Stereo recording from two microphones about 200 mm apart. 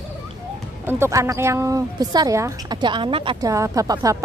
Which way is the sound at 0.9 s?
15° right (ahead or behind).